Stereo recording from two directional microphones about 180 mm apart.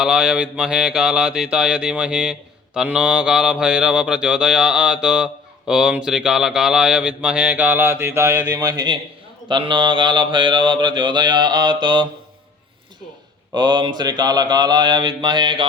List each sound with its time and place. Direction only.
0.0 s mantra: 5° right (ahead or behind); by 12.0 s 25° right (ahead or behind)
13.5 s mantra: 25° right (ahead or behind)